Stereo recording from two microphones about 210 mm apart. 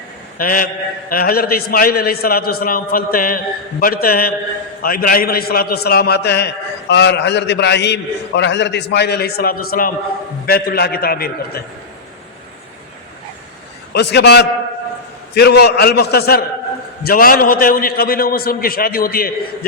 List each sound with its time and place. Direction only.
0.3 s a man's voice: 45° left (ahead or behind)
13.9 s a man's voice: 55° left (ahead or behind)